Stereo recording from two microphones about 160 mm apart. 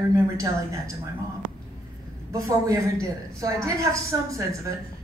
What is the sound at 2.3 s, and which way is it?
A woman's voice, 20° right (ahead or behind).